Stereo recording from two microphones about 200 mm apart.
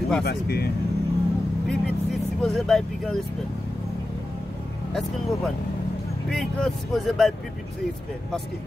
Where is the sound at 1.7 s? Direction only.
Centre (ahead or behind).